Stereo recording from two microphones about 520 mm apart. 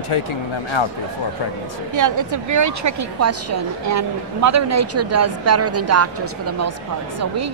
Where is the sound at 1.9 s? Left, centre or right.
Right.